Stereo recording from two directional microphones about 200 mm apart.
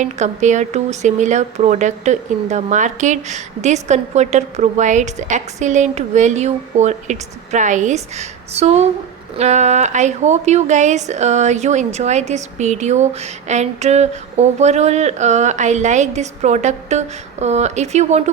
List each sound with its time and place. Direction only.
0.0 s speech: 35° right (ahead or behind)